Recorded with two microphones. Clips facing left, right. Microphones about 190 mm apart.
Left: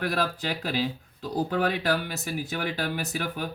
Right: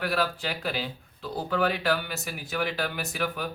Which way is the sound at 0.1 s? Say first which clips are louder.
Even; 35° left (ahead or behind).